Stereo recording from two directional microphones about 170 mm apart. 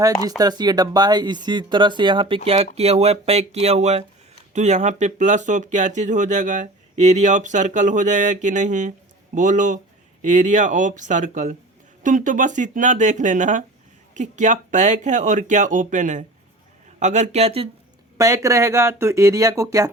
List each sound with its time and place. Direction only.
0.3 s speech: 25° right (ahead or behind)
18.2 s speech: 20° right (ahead or behind)